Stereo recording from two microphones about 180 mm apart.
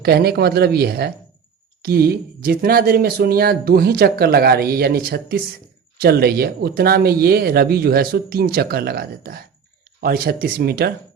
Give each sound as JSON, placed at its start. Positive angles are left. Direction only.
{"t": 0.0, "sound": "speech", "side_deg": -60}